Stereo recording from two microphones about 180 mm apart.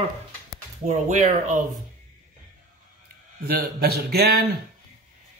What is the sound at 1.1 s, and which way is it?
Speech, 40° right (ahead or behind).